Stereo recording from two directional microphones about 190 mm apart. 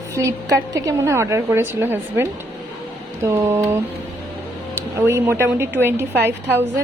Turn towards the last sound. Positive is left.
turn(degrees=-10)  # may be behind; listen again after turning